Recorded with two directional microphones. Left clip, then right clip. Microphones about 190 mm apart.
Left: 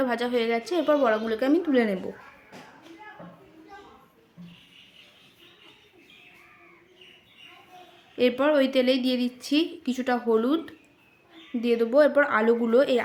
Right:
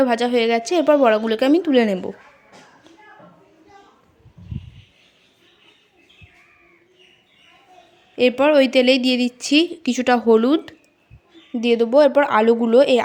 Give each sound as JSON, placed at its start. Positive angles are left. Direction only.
{"t": 0.0, "sound": "a woman's voice", "side_deg": -30}
{"t": 8.1, "sound": "a woman's voice", "side_deg": -25}